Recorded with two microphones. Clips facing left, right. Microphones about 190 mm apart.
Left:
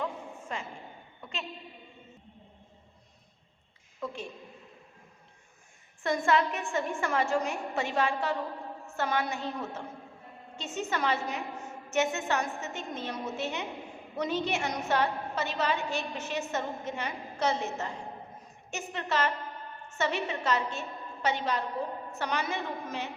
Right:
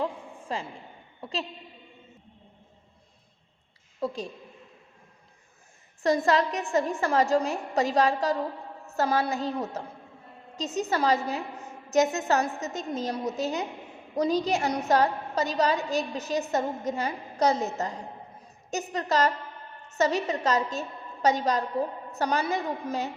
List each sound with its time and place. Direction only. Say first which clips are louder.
0.0 s a sound: right 4 dB; 30° right (ahead or behind)
1.2 s a woman's voice: right 7 dB; 35° right (ahead or behind)
4.0 s a woman's voice: right 6 dB; 35° right (ahead or behind)
6.0 s a woman's voice: right 4 dB; 40° right (ahead or behind)